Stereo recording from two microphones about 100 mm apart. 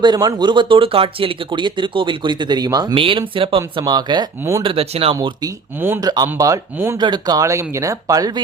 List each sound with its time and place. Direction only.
0.0 s speech: 45° right (ahead or behind)
2.9 s speech: 60° right (ahead or behind)
3.8 s speech: 45° right (ahead or behind)
4.6 s speech: 70° right (ahead or behind)
6.0 s speech: 40° right (ahead or behind)
6.2 s speech: 30° right (ahead or behind)
7.0 s speech: 45° right (ahead or behind)